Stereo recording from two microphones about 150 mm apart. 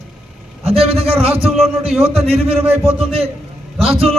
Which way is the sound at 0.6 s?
40° right (ahead or behind).